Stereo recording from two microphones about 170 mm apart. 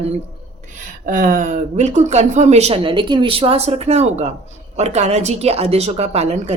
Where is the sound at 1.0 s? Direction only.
55° right (ahead or behind).